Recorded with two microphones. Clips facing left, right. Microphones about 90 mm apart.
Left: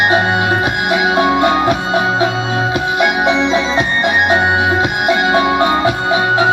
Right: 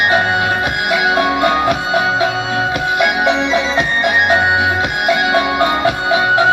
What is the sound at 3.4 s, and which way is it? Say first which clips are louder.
Music: left 1 dB; 30° left (ahead or behind).